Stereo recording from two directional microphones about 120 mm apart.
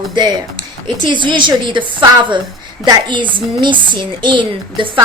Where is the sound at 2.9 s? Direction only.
40° right (ahead or behind).